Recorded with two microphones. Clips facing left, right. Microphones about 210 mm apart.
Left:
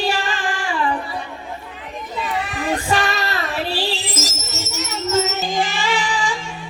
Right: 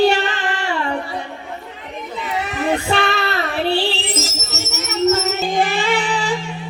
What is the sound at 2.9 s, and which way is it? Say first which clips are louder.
Child singing: right 2 dB; 60° right (ahead or behind).